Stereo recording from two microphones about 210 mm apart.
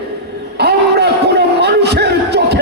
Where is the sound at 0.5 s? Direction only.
50° right (ahead or behind).